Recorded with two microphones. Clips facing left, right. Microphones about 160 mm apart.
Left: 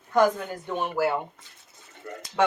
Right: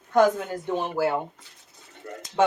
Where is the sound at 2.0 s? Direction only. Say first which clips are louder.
Even; 35° right (ahead or behind).